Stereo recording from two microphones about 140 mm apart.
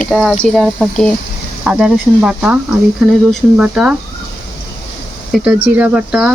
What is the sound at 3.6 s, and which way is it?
Speech, 10° right (ahead or behind).